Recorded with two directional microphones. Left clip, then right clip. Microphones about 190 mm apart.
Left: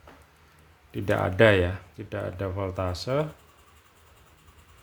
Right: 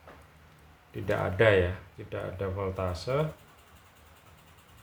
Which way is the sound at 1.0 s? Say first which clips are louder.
Left 4 dB; 65° left (ahead or behind).